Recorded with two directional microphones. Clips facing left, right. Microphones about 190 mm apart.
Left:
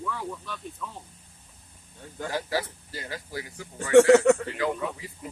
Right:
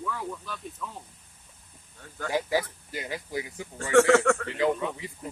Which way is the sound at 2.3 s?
15° right (ahead or behind).